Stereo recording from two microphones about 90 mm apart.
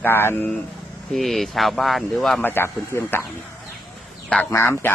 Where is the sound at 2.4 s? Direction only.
25° left (ahead or behind).